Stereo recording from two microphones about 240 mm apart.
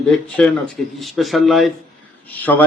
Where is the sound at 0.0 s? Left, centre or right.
Centre.